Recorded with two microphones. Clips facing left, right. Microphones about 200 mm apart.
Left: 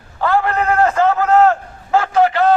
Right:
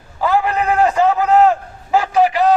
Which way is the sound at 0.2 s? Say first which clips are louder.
Even; 15° right (ahead or behind).